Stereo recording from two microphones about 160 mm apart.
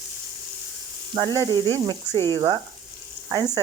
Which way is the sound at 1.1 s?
25° right (ahead or behind).